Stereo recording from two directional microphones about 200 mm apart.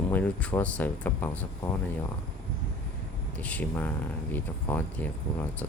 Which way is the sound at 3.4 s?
10° left (ahead or behind).